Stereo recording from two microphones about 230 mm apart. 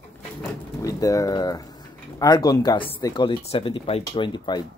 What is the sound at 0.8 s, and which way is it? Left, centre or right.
Speech, centre.